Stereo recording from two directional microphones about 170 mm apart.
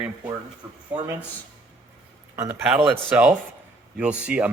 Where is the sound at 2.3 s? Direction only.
10° right (ahead or behind).